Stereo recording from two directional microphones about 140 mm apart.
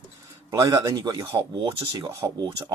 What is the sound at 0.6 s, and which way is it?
Speech, 25° right (ahead or behind).